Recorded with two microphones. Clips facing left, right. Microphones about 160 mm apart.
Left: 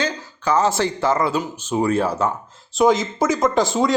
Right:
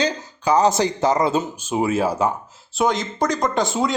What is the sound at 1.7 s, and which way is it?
Speech, 10° right (ahead or behind).